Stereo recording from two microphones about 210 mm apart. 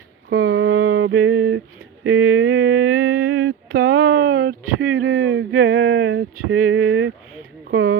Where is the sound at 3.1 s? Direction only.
60° right (ahead or behind).